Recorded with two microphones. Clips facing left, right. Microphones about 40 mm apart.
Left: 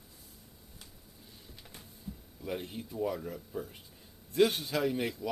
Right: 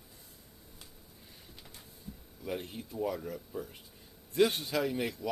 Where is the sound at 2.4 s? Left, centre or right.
Centre.